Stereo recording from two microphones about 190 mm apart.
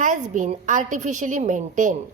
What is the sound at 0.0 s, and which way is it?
A woman's voice, 40° right (ahead or behind).